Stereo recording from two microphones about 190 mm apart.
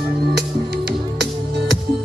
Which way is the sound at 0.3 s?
60° right (ahead or behind).